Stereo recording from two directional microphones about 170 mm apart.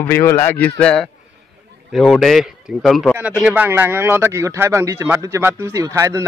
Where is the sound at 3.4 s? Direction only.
10° right (ahead or behind).